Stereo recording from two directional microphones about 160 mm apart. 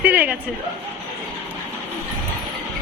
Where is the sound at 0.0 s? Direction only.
10° right (ahead or behind).